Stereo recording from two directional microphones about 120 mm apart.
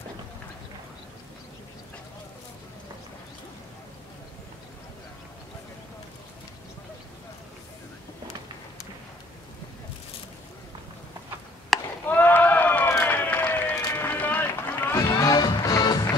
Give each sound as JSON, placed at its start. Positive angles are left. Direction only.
{"t": 11.7, "sound": "chop", "side_deg": 0}
{"t": 12.1, "sound": "run", "side_deg": 15}
{"t": 15.0, "sound": "music", "side_deg": 30}